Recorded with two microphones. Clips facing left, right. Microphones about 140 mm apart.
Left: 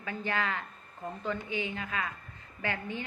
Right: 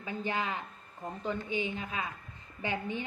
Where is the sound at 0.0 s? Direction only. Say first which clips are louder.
Left 1 dB; 15° right (ahead or behind).